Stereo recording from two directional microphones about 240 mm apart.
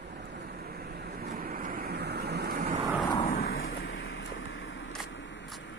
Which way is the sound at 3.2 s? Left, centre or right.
Left.